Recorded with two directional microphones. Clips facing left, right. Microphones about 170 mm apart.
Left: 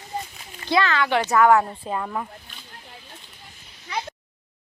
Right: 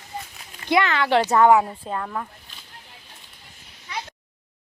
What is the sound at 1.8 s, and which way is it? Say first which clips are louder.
Speech: left 1 dB; 5° left (ahead or behind).